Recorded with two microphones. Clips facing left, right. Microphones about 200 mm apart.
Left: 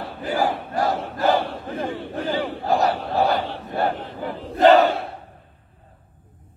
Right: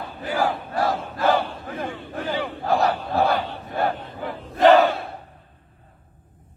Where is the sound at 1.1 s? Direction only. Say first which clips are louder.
Even; 40° left (ahead or behind).